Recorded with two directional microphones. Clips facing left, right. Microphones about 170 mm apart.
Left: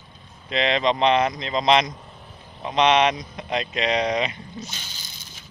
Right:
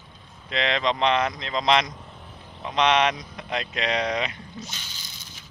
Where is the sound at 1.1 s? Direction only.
20° left (ahead or behind).